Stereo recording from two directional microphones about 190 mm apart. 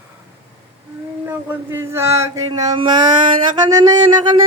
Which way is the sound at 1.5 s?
10° right (ahead or behind).